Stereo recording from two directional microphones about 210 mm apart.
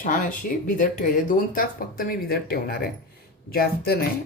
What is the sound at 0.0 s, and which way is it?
Speech, 40° left (ahead or behind).